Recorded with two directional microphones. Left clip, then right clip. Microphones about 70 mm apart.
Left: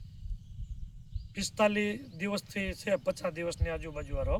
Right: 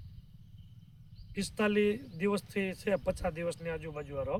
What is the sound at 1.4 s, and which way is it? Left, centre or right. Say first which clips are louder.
Speech: left 2 dB; right.